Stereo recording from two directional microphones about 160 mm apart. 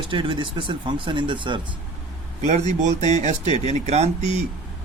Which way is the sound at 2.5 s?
45° right (ahead or behind).